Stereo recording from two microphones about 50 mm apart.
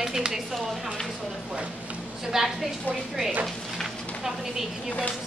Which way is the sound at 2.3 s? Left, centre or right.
Centre.